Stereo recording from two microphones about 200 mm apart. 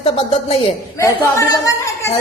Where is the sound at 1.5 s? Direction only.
15° left (ahead or behind).